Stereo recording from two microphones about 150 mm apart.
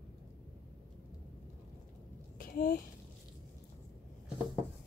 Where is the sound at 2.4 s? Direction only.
75° left (ahead or behind).